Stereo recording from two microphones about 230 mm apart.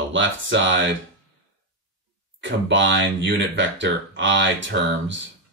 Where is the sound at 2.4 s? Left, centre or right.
Right.